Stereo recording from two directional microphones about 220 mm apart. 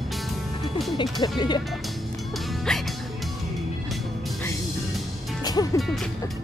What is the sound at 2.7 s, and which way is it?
Music, centre (ahead or behind).